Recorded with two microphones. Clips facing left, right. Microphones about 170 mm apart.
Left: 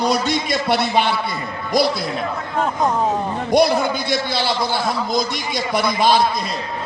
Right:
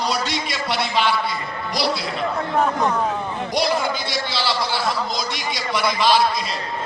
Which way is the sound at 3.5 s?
55° left (ahead or behind).